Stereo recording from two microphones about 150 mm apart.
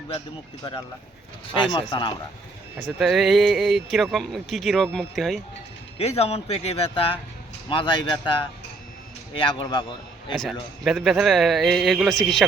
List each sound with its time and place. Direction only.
0.6 s speech: 30° left (ahead or behind)
3.0 s speech: centre (ahead or behind)
6.0 s a man's voice: 45° left (ahead or behind)
10.3 s speech: centre (ahead or behind)